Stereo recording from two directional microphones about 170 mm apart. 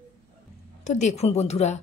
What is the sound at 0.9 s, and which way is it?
Speech, 45° left (ahead or behind).